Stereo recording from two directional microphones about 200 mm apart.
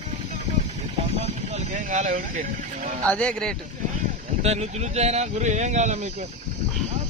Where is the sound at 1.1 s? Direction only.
35° right (ahead or behind).